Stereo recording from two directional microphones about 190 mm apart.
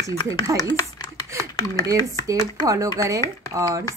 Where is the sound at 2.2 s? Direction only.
15° right (ahead or behind).